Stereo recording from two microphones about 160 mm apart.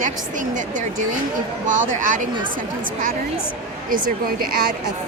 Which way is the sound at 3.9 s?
60° right (ahead or behind).